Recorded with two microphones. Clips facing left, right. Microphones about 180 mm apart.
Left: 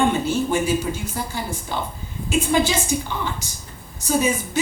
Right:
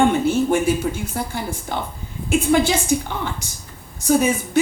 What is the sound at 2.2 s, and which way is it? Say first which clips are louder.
Speech: right 3 dB; 55° right (ahead or behind).